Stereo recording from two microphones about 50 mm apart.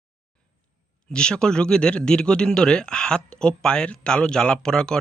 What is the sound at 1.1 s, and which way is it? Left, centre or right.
Speech, centre.